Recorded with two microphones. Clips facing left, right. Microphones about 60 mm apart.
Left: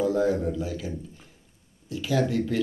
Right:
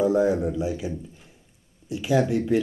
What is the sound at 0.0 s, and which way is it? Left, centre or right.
Speech, centre.